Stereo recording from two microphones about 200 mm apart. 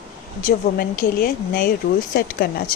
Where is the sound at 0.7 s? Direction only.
45° left (ahead or behind).